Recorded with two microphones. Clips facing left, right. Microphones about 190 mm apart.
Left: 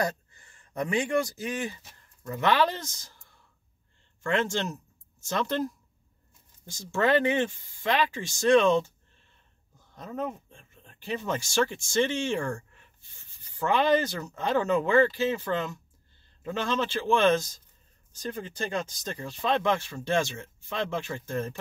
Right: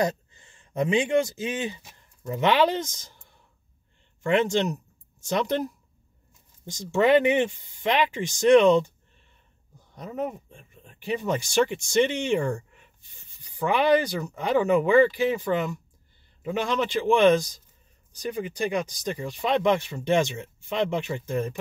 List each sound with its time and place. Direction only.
0.0 s speech: 20° right (ahead or behind)
9.9 s speech: 15° right (ahead or behind)